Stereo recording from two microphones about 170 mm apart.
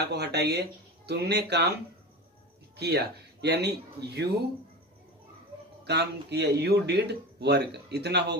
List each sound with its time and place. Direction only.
0.0 s speech: 75° right (ahead or behind)
2.8 s speech: 75° right (ahead or behind)
5.9 s speech: 80° right